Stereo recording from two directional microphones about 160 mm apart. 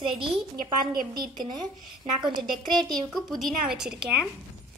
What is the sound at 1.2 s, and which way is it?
Speech, 25° right (ahead or behind).